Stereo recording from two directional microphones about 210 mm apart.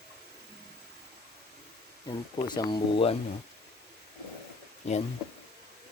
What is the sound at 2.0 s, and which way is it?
Speech, 20° left (ahead or behind).